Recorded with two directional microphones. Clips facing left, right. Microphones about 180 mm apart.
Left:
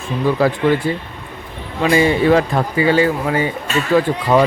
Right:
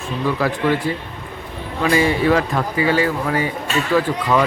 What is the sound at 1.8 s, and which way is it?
Speech, 25° left (ahead or behind).